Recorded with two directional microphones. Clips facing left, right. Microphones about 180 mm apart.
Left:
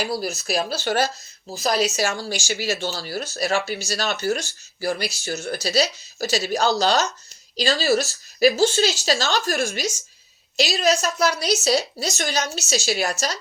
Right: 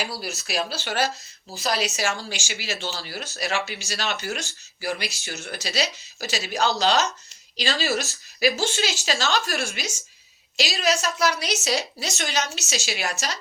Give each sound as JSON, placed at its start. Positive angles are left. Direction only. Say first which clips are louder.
{"t": 0.1, "sound": "speech", "louder": "left 6 dB", "side_deg": 45}